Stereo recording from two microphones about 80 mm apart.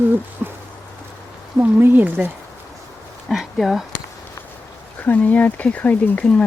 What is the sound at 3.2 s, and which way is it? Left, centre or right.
Speech, centre.